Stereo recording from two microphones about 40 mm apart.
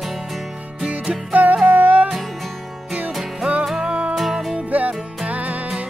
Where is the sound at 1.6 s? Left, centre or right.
Right.